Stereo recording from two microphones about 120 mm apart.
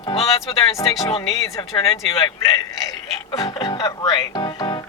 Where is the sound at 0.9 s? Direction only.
30° left (ahead or behind).